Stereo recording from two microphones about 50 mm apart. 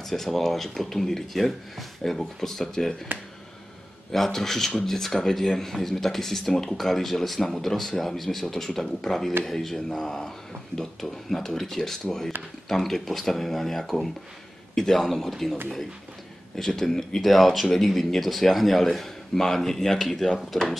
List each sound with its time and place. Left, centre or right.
0.0 s speech: centre
3.1 s speech: right
4.1 s speech: centre
16.5 s speech: centre